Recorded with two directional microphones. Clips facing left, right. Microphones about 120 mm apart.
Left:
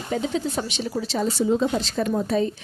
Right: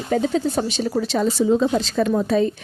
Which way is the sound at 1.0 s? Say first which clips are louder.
Right 4 dB; 90° right.